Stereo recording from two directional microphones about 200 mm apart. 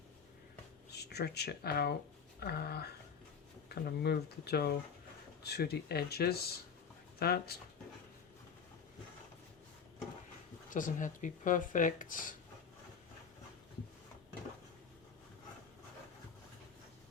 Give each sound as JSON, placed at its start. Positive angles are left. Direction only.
{"t": 0.9, "sound": "speech", "side_deg": 55}
{"t": 10.7, "sound": "speech", "side_deg": 40}